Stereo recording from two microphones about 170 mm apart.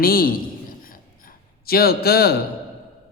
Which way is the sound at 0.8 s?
60° left (ahead or behind).